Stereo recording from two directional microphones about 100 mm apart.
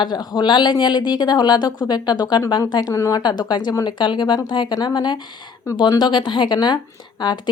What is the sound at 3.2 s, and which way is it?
Speech, 45° left (ahead or behind).